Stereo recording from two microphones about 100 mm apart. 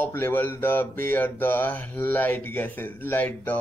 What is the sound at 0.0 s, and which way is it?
Mantra, 20° left (ahead or behind).